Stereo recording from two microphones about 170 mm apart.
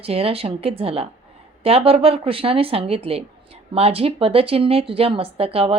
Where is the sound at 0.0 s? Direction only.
35° right (ahead or behind).